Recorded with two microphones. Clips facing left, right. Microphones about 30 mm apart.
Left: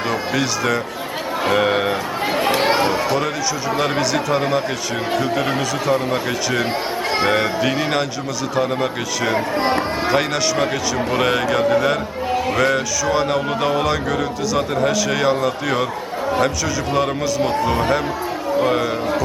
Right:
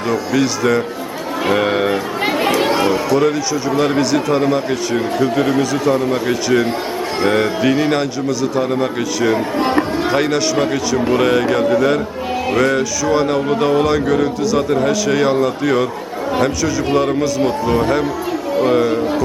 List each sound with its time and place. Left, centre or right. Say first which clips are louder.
0.3 s music: right 6 dB; centre
2.5 s chatter: even; left
2.8 s a sound: right 3 dB; centre
3.8 s a man's voice: right 5 dB; centre
5.5 s music: right 4 dB; centre
7.3 s a man's voice: right 6 dB; centre
9.3 s speech: right 1 dB; left
10.1 s music: right 2 dB; centre
16.9 s a man's voice: right 3 dB; centre
18.6 s music: right 5 dB; centre